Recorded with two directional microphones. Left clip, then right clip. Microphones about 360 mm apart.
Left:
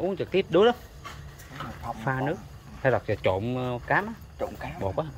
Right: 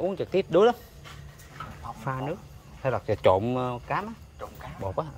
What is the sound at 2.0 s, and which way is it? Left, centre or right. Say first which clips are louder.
Speech: left 3 dB; centre.